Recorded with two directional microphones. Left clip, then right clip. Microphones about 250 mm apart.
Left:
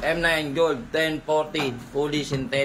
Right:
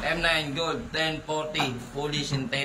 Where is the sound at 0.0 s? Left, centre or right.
Centre.